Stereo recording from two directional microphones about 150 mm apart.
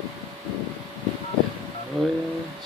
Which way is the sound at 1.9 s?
Centre (ahead or behind).